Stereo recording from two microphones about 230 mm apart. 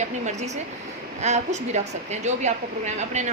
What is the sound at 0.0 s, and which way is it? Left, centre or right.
A woman's voice, right.